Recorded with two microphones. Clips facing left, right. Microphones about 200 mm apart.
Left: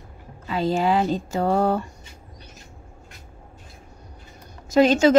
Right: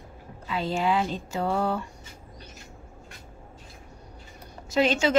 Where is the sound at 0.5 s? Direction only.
40° left (ahead or behind).